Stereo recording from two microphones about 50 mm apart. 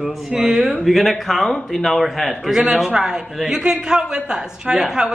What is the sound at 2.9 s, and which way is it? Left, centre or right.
A woman's voice, centre.